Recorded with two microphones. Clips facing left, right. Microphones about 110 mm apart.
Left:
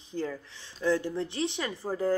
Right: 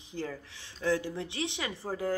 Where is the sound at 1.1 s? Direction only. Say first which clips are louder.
Left 4 dB; 15° right (ahead or behind).